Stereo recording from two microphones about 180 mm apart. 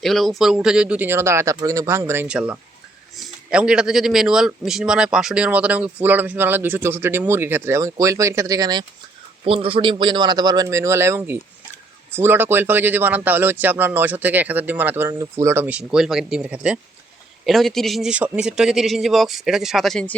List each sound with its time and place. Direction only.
0.0 s a man's voice: centre (ahead or behind); by 8.8 s 20° right (ahead or behind)
9.4 s a man's voice: 30° right (ahead or behind); by 20.1 s 5° left (ahead or behind)